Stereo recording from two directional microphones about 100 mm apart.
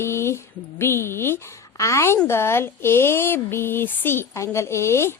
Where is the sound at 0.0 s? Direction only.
25° left (ahead or behind).